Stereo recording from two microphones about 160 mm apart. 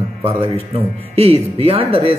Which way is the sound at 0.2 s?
35° right (ahead or behind).